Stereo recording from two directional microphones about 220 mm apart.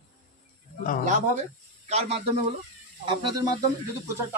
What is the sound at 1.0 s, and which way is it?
Speech, 30° right (ahead or behind).